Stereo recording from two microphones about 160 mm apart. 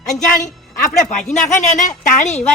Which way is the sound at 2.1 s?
45° left (ahead or behind).